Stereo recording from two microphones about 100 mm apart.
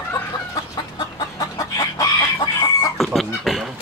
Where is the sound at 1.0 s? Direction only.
45° left (ahead or behind).